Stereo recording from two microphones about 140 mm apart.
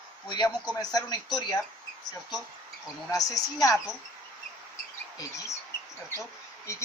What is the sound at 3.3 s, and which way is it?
Speech, 25° left (ahead or behind).